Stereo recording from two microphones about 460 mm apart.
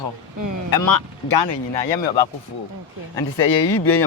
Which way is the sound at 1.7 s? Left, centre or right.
Left.